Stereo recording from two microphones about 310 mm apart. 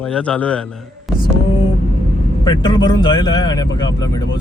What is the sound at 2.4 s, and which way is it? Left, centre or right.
A man's voice, centre.